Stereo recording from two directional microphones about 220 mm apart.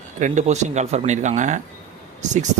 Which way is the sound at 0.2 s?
30° right (ahead or behind).